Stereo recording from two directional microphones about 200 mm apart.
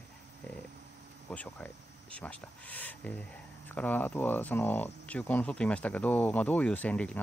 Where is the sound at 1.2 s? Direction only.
5° left (ahead or behind).